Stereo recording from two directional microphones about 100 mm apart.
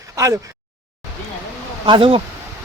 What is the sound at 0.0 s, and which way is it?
Speech, 35° right (ahead or behind).